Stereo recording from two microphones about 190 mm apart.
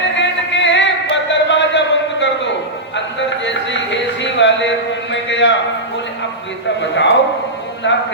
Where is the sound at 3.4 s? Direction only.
70° left (ahead or behind).